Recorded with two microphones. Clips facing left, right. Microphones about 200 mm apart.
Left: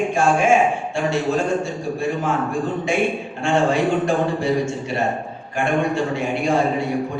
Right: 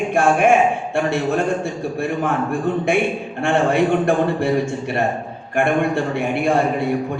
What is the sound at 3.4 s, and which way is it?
A man's voice, 60° right (ahead or behind).